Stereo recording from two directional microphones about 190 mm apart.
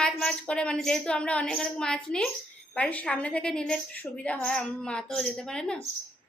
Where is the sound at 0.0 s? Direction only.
5° left (ahead or behind).